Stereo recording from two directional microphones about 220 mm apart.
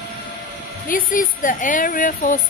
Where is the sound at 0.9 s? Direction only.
40° left (ahead or behind).